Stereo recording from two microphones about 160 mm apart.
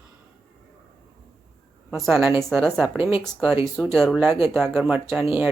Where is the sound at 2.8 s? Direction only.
10° right (ahead or behind).